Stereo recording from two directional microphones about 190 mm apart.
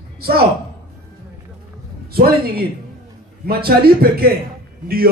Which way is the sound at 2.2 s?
55° right (ahead or behind).